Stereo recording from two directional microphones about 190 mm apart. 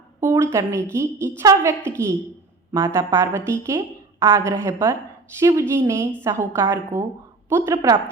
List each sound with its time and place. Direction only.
0.2 s a woman's voice: 15° right (ahead or behind)